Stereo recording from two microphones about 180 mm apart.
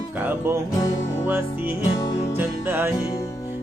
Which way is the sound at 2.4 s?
10° right (ahead or behind).